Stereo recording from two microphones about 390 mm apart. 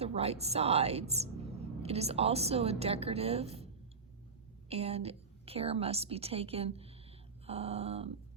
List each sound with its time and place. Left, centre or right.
0.0 s a woman's voice: centre
4.7 s a woman's voice: centre